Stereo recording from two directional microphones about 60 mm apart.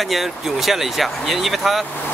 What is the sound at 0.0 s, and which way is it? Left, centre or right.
Speech, centre.